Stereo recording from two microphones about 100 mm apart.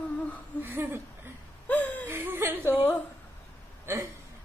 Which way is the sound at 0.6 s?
20° right (ahead or behind).